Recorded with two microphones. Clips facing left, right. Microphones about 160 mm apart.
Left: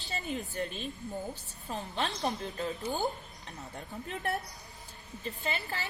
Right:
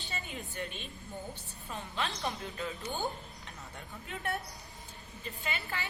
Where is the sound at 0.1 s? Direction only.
40° left (ahead or behind).